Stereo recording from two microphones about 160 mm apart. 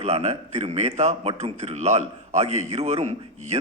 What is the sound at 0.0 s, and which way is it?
A man's voice, 45° right (ahead or behind).